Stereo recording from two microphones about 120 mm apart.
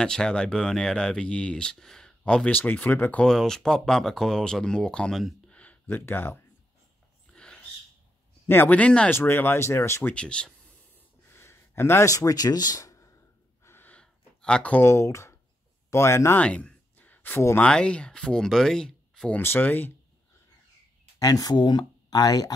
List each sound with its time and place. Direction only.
0.0 s speech: 5° left (ahead or behind)
7.3 s a sound: 10° left (ahead or behind)
8.5 s speech: 15° left (ahead or behind)
10.1 s speech: 10° left (ahead or behind)
11.3 s speech: 20° left (ahead or behind)
13.7 s a sound: 15° left (ahead or behind)
15.9 s speech: 20° left (ahead or behind)
16.4 s a sound: 10° left (ahead or behind)
17.6 s speech: 10° left (ahead or behind)
19.4 s speech: 15° left (ahead or behind)
21.2 s speech: 30° left (ahead or behind)